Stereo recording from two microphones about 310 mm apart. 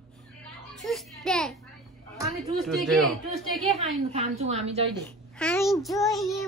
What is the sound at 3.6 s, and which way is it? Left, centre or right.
A woman's voice, right.